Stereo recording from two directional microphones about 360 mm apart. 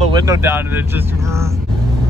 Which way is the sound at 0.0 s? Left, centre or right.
Centre.